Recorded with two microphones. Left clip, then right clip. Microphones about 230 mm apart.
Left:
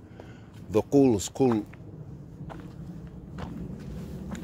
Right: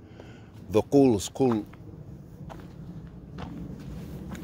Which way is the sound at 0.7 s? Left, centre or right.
Right.